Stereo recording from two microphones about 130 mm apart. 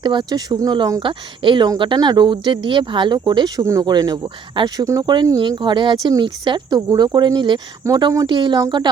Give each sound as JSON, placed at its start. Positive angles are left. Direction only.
{"t": 0.0, "sound": "speech", "side_deg": -35}